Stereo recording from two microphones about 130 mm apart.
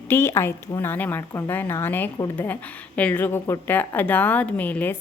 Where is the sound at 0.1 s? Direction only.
20° left (ahead or behind).